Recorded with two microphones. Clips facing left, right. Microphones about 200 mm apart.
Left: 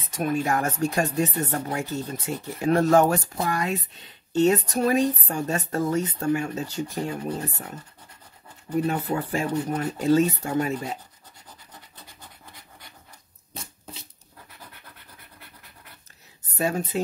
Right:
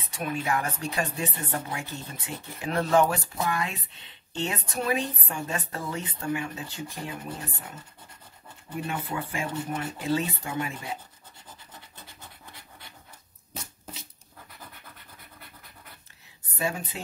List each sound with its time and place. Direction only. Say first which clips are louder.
0.1 s speech: left 5 dB; 45° left (ahead or behind)
8.7 s speech: left 8 dB; 40° left (ahead or behind)
16.5 s speech: left 6 dB; 40° left (ahead or behind)